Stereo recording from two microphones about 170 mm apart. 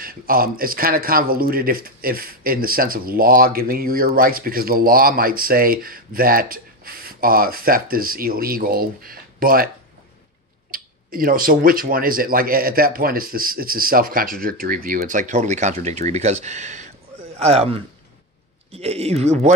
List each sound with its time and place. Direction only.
0.0 s speech: 60° right (ahead or behind)
10.7 s speech: 60° right (ahead or behind); by 19.5 s 40° right (ahead or behind)